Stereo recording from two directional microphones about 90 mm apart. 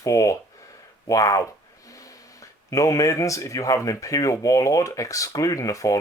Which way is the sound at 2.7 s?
40° left (ahead or behind).